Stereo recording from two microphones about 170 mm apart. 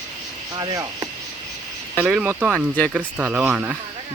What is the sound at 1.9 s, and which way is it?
Speech, 10° right (ahead or behind).